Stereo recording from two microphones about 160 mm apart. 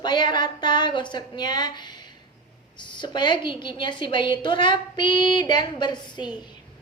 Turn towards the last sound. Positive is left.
turn(degrees=25)  # may be behind; listen again after turning